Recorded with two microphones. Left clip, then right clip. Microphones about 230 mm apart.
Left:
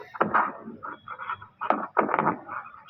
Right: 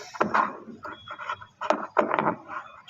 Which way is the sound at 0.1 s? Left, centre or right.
Right.